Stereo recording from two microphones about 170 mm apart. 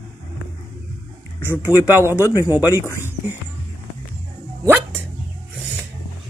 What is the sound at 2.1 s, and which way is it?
Speech, 15° left (ahead or behind).